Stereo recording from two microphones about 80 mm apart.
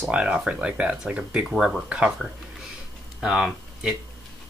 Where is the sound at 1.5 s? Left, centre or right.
Centre.